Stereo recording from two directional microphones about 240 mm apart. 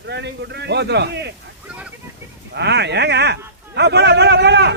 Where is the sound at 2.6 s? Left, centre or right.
Right.